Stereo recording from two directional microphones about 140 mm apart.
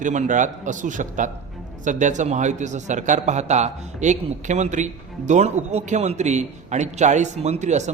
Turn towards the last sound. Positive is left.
turn(degrees=-55)  # may be behind; listen again after turning